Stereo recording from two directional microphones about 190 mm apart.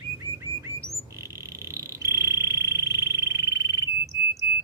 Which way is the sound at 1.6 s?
15° right (ahead or behind).